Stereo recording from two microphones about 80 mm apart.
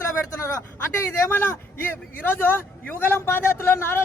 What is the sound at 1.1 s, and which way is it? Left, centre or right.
A man's voice, left.